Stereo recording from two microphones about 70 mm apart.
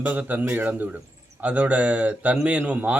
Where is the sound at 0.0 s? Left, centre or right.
Right.